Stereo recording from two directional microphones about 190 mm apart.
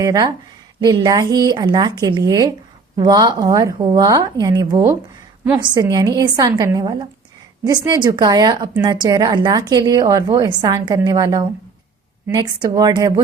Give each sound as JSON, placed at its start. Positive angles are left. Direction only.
{"t": 0.0, "sound": "a woman's voice", "side_deg": -15}